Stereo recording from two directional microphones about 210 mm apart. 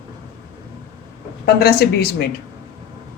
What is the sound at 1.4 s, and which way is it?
Speech, 50° left (ahead or behind).